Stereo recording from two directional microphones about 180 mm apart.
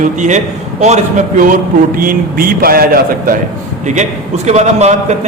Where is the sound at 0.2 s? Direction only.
40° right (ahead or behind).